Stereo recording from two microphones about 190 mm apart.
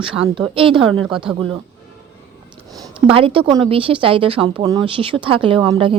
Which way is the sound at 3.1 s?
30° right (ahead or behind).